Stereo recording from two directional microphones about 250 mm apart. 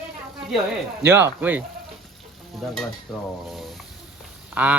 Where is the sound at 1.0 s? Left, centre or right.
Centre.